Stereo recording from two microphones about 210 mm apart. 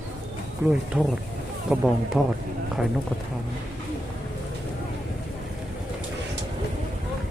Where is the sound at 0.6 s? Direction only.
5° right (ahead or behind).